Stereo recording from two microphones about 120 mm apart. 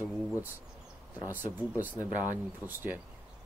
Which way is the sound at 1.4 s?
15° right (ahead or behind).